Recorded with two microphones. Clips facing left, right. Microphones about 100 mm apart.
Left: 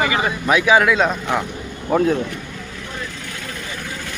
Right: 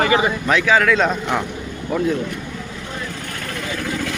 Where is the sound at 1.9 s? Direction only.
45° left (ahead or behind).